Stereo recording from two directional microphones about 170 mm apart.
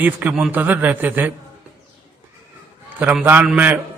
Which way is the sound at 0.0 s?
10° right (ahead or behind).